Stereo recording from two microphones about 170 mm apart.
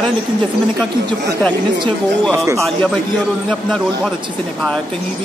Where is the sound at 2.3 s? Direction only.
15° right (ahead or behind).